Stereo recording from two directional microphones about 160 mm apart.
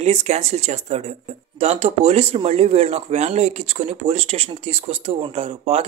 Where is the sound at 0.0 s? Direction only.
45° right (ahead or behind).